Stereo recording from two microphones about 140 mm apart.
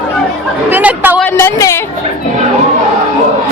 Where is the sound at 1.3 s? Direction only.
20° left (ahead or behind).